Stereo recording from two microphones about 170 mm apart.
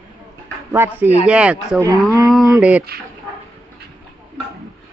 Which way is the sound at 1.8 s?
20° right (ahead or behind).